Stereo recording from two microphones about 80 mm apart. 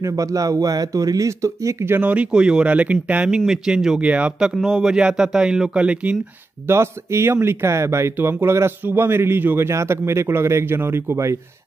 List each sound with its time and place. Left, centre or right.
0.0 s speech: right
2.0 s speech: centre
4.6 s speech: centre
6.7 s speech: right